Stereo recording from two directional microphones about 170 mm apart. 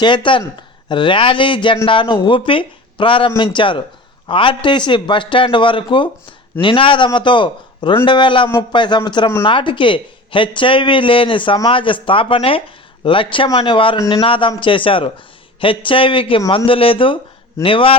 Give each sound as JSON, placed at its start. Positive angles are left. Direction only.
{"t": 0.0, "sound": "speech", "side_deg": 30}